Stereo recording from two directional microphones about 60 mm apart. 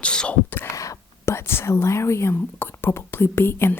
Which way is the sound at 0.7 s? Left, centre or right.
Left.